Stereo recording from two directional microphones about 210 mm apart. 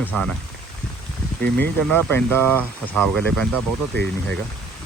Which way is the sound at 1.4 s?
45° right (ahead or behind).